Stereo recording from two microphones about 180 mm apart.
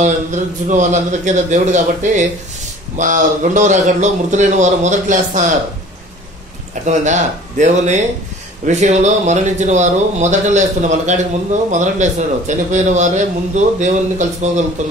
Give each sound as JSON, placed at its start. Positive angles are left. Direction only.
{"t": 0.0, "sound": "speech", "side_deg": -40}
{"t": 6.7, "sound": "speech", "side_deg": -45}